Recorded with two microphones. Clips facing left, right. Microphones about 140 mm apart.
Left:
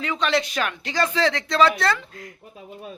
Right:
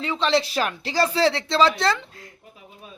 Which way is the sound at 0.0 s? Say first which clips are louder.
Right 1 dB; 30° right (ahead or behind).